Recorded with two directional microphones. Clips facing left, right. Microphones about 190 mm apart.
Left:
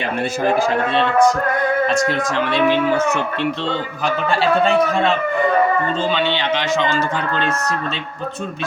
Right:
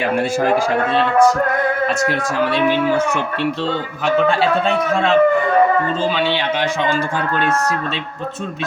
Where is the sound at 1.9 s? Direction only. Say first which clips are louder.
Left 1 dB; 5° right (ahead or behind).